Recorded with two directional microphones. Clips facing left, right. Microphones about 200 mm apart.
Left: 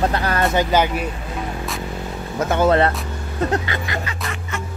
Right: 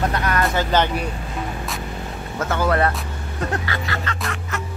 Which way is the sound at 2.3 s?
20° left (ahead or behind).